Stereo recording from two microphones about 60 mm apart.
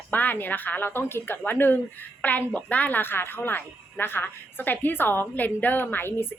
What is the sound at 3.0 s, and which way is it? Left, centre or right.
A woman's voice, left.